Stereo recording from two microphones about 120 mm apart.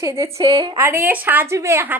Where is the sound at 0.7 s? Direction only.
20° right (ahead or behind).